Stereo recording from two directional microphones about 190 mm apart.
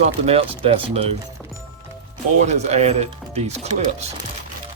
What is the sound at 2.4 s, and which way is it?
Speech, 35° right (ahead or behind).